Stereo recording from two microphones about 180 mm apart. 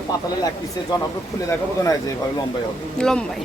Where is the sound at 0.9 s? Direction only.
20° left (ahead or behind).